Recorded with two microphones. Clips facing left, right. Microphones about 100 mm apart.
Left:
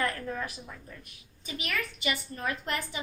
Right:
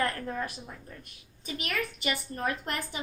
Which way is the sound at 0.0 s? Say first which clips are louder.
Right 1 dB; 40° right (ahead or behind).